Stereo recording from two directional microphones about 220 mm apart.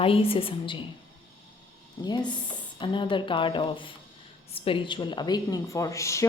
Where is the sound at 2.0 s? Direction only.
15° left (ahead or behind).